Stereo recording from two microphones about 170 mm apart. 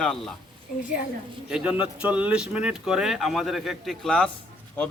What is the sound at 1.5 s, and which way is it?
A man's voice, 5° right (ahead or behind).